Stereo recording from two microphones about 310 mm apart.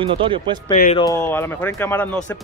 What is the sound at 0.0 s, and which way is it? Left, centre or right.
Speech, centre.